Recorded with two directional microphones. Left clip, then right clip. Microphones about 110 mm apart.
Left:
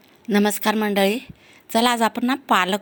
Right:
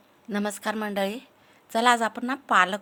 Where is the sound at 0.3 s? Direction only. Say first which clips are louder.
Left 9 dB; 25° left (ahead or behind).